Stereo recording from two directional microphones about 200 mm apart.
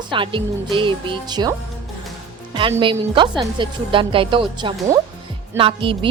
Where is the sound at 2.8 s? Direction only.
25° right (ahead or behind).